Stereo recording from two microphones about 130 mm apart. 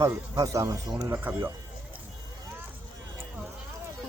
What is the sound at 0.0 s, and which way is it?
Speech, 25° right (ahead or behind).